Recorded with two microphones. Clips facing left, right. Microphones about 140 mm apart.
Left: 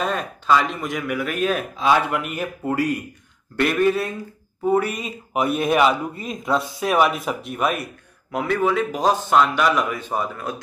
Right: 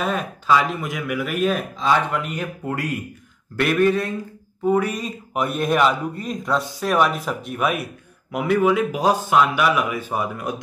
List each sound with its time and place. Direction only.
0.0 s speech: 5° right (ahead or behind)